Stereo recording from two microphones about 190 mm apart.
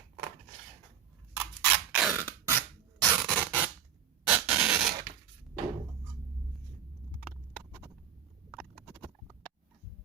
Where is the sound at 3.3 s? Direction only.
10° right (ahead or behind).